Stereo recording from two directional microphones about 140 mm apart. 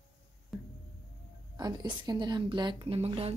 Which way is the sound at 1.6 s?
30° right (ahead or behind).